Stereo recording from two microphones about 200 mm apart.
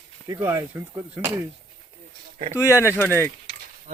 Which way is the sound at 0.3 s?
10° right (ahead or behind).